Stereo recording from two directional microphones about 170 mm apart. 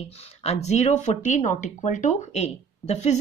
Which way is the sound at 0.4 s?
40° left (ahead or behind).